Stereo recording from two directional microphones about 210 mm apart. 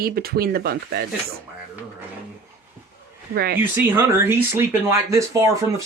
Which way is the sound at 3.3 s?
45° right (ahead or behind).